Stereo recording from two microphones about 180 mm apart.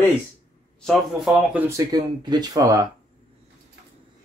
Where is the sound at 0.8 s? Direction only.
Centre (ahead or behind).